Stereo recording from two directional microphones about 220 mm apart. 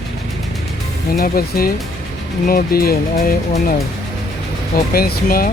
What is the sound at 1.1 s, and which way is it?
Speech, 40° left (ahead or behind).